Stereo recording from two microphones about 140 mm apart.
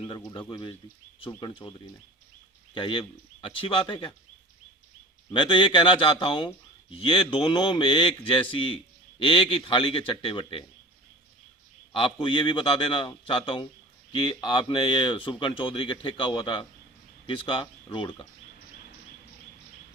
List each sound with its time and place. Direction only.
1.4 s speech: 30° left (ahead or behind)
2.7 s a man's voice: 35° left (ahead or behind)
5.3 s a man's voice: 35° left (ahead or behind)
11.9 s a man's voice: 40° left (ahead or behind)